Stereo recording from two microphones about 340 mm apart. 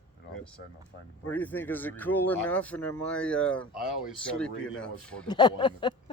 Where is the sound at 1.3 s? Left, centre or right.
Centre.